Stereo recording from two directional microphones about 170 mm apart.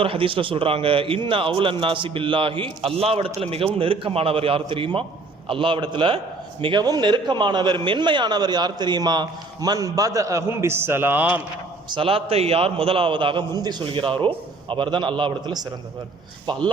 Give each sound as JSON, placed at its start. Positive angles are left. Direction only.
{"t": 0.0, "sound": "a man's voice", "side_deg": -30}
{"t": 11.9, "sound": "a man's voice", "side_deg": -30}